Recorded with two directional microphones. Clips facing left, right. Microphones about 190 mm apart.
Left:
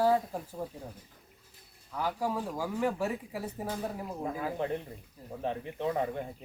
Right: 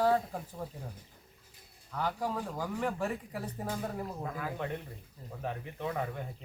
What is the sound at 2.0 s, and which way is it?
Speech, 10° left (ahead or behind).